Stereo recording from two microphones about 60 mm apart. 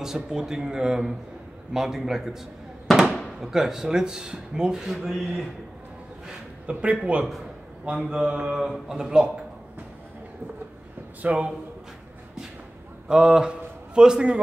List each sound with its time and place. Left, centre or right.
0.0 s speech: centre
6.6 s speech: right
8.5 s speech: centre
11.2 s speech: centre
13.1 s a man's voice: centre